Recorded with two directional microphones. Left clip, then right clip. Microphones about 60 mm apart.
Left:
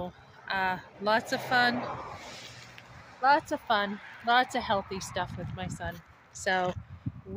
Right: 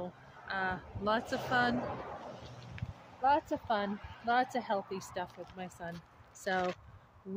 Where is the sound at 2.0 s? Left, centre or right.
Left.